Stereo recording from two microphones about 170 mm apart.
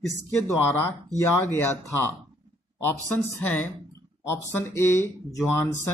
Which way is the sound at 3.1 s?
10° left (ahead or behind).